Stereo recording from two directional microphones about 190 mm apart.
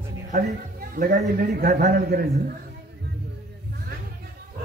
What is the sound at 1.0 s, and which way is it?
Speech, 45° right (ahead or behind).